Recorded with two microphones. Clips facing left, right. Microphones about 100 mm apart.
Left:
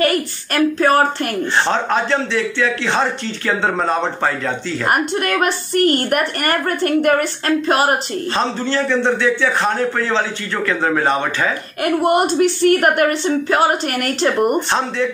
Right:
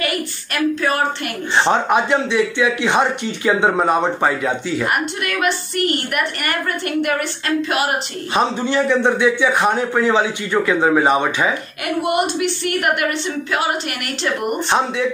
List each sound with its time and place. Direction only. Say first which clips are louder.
0.7 s a woman's voice: left 5 dB; 40° left (ahead or behind)
1.7 s a man's voice: right 2 dB; 15° right (ahead or behind)
4.8 s a woman's voice: left 8 dB; 40° left (ahead or behind)
8.4 s a man's voice: right 3 dB; 15° right (ahead or behind)
11.8 s a woman's voice: left 4 dB; 40° left (ahead or behind)